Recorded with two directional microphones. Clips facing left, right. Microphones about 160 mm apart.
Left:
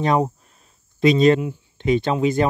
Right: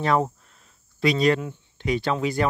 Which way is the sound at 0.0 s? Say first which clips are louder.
Left 3 dB; 20° left (ahead or behind).